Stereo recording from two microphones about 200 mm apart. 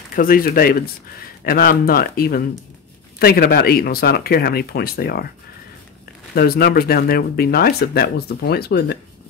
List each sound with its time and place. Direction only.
0.1 s speech: 45° left (ahead or behind)
6.3 s speech: 50° left (ahead or behind)